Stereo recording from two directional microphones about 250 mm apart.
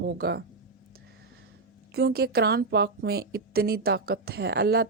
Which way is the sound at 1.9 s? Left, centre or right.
Right.